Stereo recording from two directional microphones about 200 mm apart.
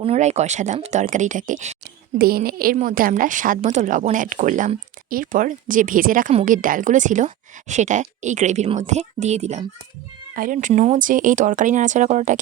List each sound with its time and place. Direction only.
0.0 s a woman's voice: 30° right (ahead or behind)
2.1 s a woman's voice: 50° right (ahead or behind)